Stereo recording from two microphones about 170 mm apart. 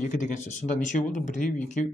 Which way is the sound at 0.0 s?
45° left (ahead or behind).